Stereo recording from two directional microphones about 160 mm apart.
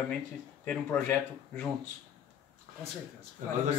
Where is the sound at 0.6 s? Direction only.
10° left (ahead or behind).